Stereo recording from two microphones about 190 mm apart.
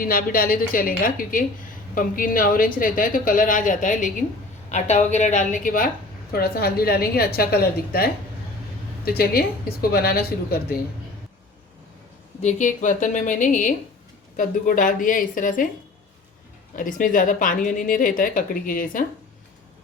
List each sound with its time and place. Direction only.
0.0 s a woman's voice: 45° left (ahead or behind)
12.4 s speech: 40° left (ahead or behind)
16.7 s speech: 45° left (ahead or behind)